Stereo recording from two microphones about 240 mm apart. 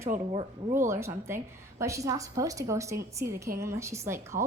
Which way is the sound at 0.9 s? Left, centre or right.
Centre.